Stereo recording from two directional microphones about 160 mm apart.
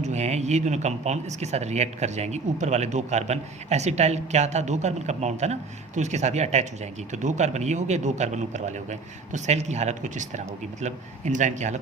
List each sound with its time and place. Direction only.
0.0 s speech: 45° right (ahead or behind)